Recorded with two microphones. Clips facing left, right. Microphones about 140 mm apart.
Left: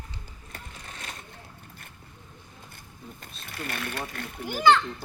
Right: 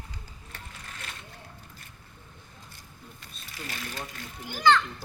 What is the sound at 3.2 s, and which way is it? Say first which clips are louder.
Speech: left 5 dB; 55° left (ahead or behind).